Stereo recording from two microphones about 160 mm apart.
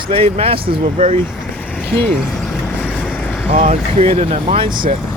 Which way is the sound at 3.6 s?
45° right (ahead or behind).